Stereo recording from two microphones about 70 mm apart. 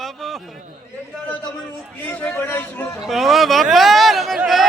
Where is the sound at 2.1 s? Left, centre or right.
Left.